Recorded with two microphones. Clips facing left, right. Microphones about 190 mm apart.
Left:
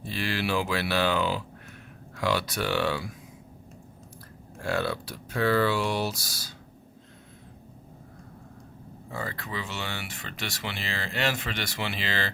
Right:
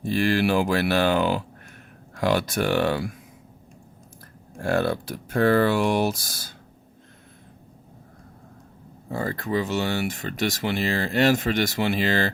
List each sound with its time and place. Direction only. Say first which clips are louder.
0.0 s speech: right 9 dB; 45° right (ahead or behind)
4.6 s speech: right 6 dB; 50° right (ahead or behind)
9.0 s speech: right 8 dB; 40° right (ahead or behind)